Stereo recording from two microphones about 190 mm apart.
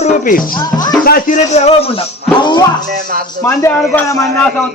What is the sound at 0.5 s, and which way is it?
Speech, 20° left (ahead or behind).